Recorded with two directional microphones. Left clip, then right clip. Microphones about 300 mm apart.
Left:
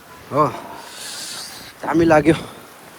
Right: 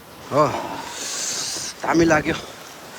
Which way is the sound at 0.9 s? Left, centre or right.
Centre.